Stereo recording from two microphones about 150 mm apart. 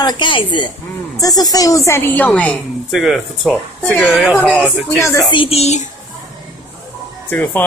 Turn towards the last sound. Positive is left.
turn(degrees=10)  # may be behind; listen again after turning